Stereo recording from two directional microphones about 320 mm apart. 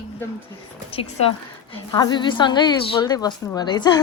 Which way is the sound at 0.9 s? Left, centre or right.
Centre.